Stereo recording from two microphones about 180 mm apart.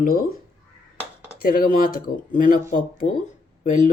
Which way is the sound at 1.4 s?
50° left (ahead or behind).